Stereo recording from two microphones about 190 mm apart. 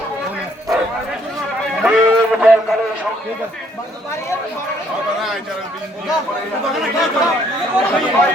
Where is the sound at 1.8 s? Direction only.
5° right (ahead or behind).